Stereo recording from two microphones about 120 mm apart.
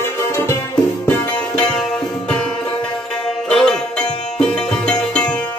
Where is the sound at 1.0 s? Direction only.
10° left (ahead or behind).